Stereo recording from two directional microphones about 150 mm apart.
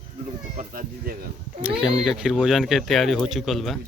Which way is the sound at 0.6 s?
70° right (ahead or behind).